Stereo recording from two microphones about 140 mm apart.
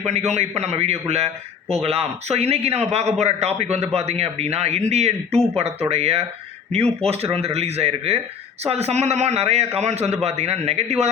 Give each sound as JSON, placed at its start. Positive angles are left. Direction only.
{"t": 0.0, "sound": "a man's voice", "side_deg": -50}